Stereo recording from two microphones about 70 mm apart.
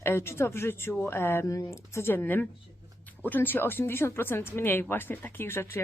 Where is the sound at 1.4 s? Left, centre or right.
Left.